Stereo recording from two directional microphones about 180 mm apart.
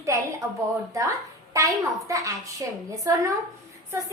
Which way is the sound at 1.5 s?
20° right (ahead or behind).